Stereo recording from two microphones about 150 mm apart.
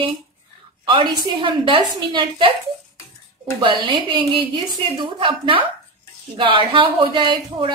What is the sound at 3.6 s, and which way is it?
A woman's voice, 30° right (ahead or behind).